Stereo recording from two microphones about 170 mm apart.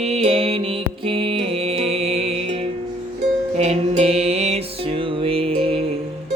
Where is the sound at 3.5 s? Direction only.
40° right (ahead or behind).